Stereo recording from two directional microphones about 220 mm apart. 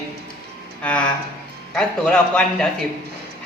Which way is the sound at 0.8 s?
5° left (ahead or behind).